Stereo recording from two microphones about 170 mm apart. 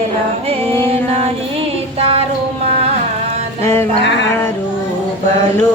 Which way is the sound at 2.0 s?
35° right (ahead or behind).